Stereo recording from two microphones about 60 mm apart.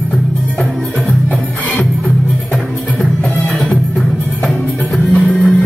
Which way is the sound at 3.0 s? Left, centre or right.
Left.